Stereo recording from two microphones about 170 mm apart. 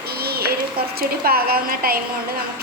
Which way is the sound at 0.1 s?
65° right (ahead or behind).